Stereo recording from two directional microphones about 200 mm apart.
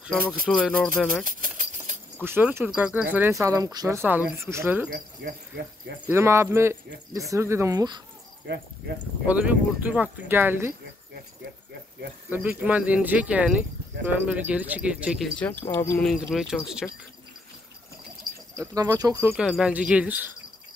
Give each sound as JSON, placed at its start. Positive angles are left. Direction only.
{"t": 0.0, "sound": "speech", "side_deg": 0}
{"t": 2.2, "sound": "speech", "side_deg": -10}
{"t": 4.9, "sound": "speech", "side_deg": -50}
{"t": 6.0, "sound": "speech", "side_deg": -15}
{"t": 8.5, "sound": "speech", "side_deg": -60}
{"t": 9.3, "sound": "speech", "side_deg": -5}
{"t": 12.3, "sound": "speech", "side_deg": -10}
{"t": 15.8, "sound": "speech", "side_deg": 10}
{"t": 16.1, "sound": "speech", "side_deg": 0}
{"t": 18.6, "sound": "speech", "side_deg": -15}
{"t": 19.3, "sound": "speech", "side_deg": -5}